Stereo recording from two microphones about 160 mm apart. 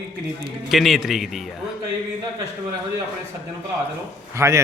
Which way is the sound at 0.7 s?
Centre (ahead or behind).